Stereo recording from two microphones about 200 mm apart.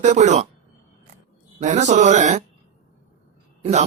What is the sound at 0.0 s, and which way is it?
Speech, 35° right (ahead or behind).